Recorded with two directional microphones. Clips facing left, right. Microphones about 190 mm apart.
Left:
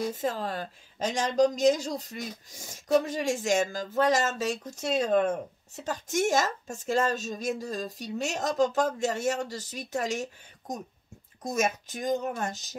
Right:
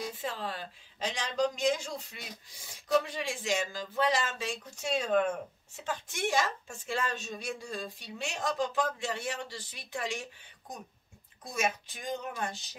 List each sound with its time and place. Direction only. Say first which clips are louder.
0.0 s speech: left 7 dB; 40° left (ahead or behind)